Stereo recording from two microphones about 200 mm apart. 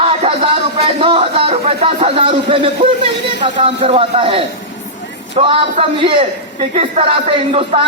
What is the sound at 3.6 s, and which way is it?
A man's voice, 25° right (ahead or behind).